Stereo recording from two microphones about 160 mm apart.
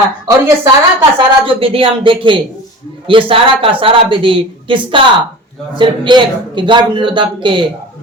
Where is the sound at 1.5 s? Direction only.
35° right (ahead or behind).